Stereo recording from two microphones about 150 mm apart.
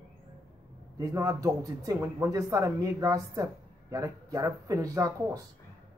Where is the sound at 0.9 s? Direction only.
25° right (ahead or behind).